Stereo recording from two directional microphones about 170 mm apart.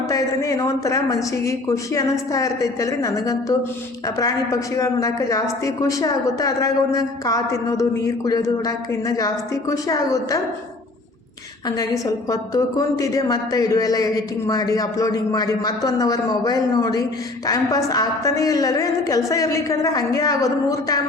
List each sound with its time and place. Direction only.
0.1 s a woman's voice: 20° left (ahead or behind)
11.8 s a woman's voice: 20° left (ahead or behind)